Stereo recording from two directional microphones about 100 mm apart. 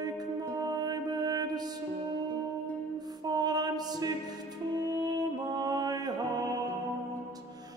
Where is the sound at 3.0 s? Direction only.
40° right (ahead or behind).